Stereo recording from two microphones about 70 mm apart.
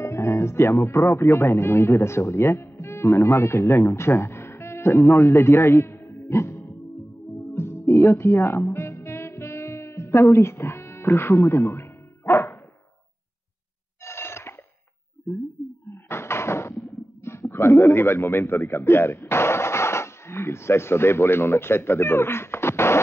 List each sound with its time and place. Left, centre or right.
0.0 s speech: left
7.5 s music: left
14.0 s a sound: left
15.9 s cupboard open or close: left
17.2 s a man's voice: left